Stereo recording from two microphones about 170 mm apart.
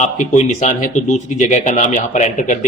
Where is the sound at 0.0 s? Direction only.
45° left (ahead or behind).